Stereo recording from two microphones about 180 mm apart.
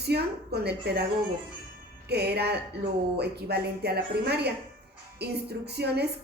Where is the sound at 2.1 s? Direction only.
65° right (ahead or behind).